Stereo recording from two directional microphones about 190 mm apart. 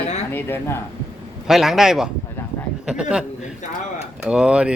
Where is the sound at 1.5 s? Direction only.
Centre (ahead or behind).